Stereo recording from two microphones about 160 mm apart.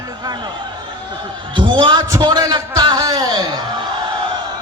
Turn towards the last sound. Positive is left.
turn(degrees=-25)  # may be behind; listen again after turning